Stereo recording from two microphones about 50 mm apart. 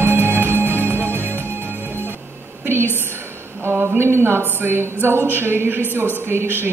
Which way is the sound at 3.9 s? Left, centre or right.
Right.